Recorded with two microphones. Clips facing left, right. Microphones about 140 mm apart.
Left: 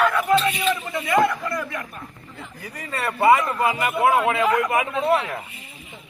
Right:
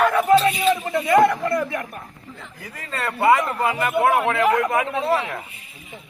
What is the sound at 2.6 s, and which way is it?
Speech, 10° left (ahead or behind).